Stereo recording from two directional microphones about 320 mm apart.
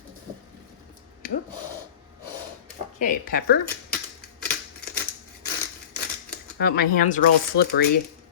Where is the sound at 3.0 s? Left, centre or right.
Left.